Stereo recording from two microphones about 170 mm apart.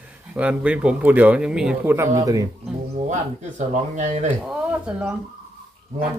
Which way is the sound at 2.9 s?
45° right (ahead or behind).